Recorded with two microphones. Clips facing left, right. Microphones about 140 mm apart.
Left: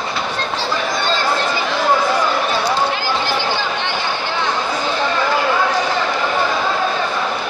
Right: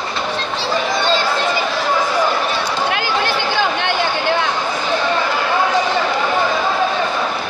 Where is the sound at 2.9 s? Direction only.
60° right (ahead or behind).